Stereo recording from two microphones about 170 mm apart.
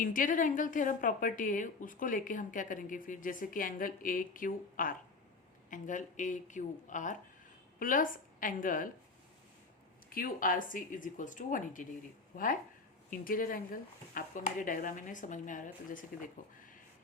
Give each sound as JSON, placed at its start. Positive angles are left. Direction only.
{"t": 0.0, "sound": "a woman's voice", "side_deg": 50}
{"t": 10.1, "sound": "a woman's voice", "side_deg": 55}
{"t": 13.1, "sound": "a woman's voice", "side_deg": 55}